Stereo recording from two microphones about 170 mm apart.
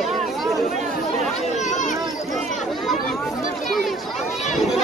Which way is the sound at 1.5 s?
45° left (ahead or behind).